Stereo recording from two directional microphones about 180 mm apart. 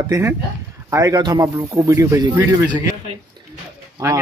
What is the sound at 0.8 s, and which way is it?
Speech, 20° right (ahead or behind).